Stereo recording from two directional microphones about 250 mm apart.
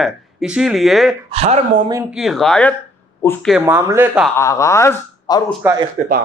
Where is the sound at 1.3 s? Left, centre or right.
Right.